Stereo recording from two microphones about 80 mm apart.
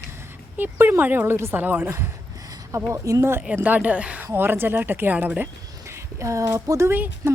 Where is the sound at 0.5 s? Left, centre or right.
Right.